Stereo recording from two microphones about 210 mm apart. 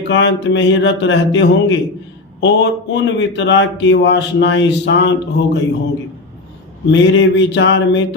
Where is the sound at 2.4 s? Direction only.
60° left (ahead or behind).